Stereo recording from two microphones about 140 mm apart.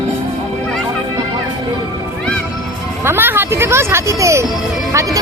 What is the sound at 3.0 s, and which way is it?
Speech, 15° right (ahead or behind).